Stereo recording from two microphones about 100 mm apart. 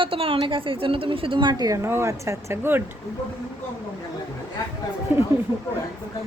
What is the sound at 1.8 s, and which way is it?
Speech, 25° right (ahead or behind).